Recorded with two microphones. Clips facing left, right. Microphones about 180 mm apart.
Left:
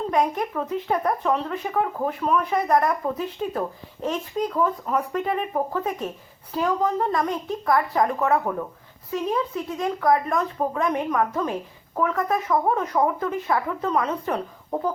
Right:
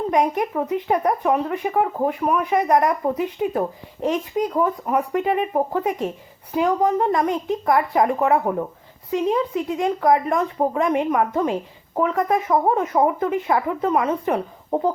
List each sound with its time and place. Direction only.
0.1 s speech: 20° right (ahead or behind)